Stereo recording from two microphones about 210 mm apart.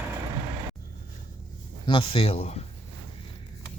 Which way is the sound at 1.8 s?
25° left (ahead or behind).